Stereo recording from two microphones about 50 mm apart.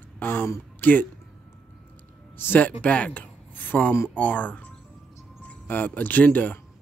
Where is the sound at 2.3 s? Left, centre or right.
Left.